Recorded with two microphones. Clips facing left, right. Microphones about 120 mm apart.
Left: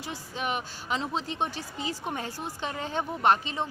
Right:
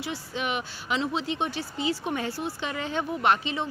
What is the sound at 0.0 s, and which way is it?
Speech, 40° left (ahead or behind).